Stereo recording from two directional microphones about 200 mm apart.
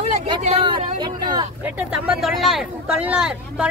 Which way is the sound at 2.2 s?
Centre (ahead or behind).